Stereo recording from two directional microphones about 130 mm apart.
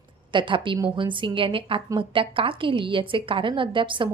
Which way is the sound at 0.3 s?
40° right (ahead or behind).